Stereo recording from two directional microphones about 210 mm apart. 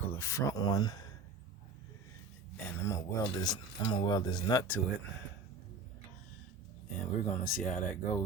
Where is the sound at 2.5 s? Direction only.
15° left (ahead or behind).